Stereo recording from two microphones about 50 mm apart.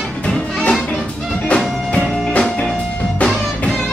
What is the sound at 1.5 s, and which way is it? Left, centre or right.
Music, left.